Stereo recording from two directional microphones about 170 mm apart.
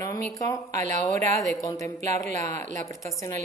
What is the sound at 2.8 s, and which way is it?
Speech, 20° left (ahead or behind).